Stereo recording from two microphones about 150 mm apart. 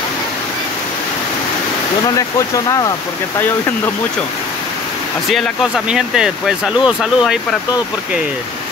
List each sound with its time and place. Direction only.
2.1 s speech: 20° left (ahead or behind)
5.3 s speech: centre (ahead or behind)